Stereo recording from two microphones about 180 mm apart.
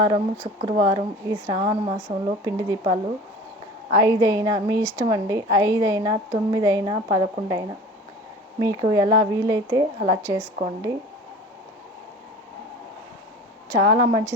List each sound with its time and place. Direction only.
0.0 s a woman's voice: 25° right (ahead or behind)
13.7 s a woman's voice: 20° right (ahead or behind)